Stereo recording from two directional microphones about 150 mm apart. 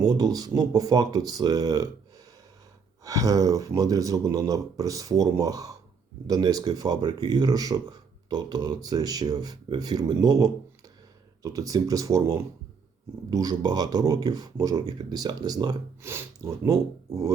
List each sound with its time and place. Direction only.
0.0 s speech: 25° right (ahead or behind)
3.0 s speech: 20° right (ahead or behind)